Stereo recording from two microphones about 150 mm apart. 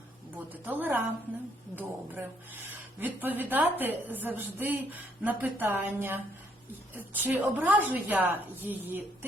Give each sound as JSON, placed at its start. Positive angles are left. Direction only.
{"t": 0.3, "sound": "a woman's voice", "side_deg": -10}